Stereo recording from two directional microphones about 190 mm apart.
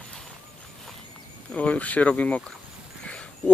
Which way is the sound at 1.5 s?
5° left (ahead or behind).